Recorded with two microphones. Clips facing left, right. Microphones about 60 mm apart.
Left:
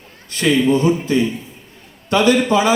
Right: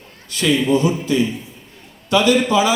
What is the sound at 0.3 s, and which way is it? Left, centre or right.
A man's voice, left.